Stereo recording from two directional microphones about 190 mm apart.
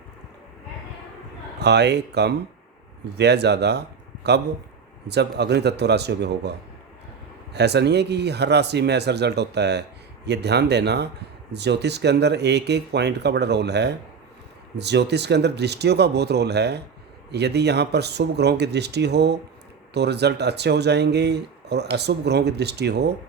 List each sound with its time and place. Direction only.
1.5 s speech: 60° right (ahead or behind)
7.5 s speech: 60° right (ahead or behind)